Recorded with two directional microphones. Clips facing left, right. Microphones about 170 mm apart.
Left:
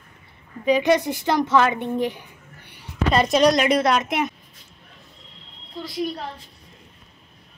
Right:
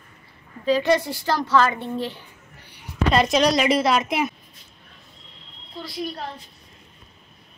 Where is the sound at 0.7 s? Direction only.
20° left (ahead or behind).